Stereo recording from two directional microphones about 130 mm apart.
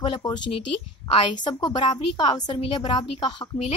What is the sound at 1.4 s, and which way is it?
A woman's voice, 35° left (ahead or behind).